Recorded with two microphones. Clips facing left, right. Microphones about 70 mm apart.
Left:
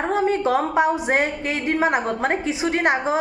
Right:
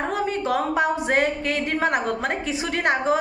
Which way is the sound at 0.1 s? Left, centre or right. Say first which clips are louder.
Left 7 dB; left.